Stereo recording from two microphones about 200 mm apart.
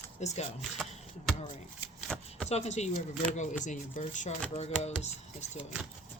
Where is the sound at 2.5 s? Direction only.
35° left (ahead or behind).